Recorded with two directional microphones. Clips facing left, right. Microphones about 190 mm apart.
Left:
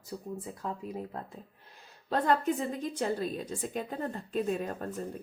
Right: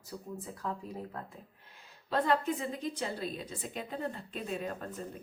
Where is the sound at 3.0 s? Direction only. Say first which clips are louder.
Left 5 dB; 45° left (ahead or behind).